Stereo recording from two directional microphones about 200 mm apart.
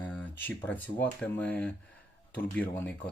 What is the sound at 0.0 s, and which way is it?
Speech, 10° left (ahead or behind).